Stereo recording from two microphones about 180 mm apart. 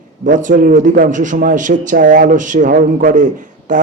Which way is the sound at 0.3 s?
45° right (ahead or behind).